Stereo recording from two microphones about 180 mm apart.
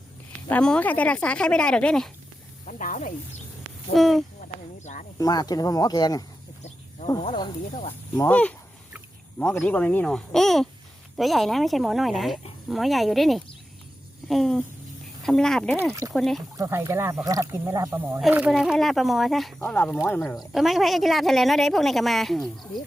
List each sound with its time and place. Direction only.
0.4 s speech: 5° left (ahead or behind)
2.6 s speech: 45° left (ahead or behind)
3.9 s speech: centre (ahead or behind)
4.4 s a sound: 45° left (ahead or behind)
5.1 s speech: 20° left (ahead or behind)
8.1 s speech: 10° left (ahead or behind)
15.9 s speech: 20° right (ahead or behind)
16.1 s speech: centre (ahead or behind)
16.6 s speech: 15° right (ahead or behind); by 20.2 s 15° left (ahead or behind)
20.5 s speech: centre (ahead or behind)